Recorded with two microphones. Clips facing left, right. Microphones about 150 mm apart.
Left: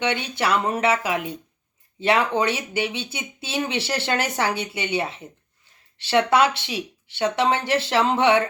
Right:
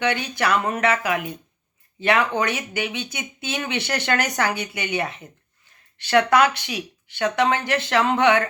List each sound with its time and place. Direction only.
0.0 s speech: 25° left (ahead or behind)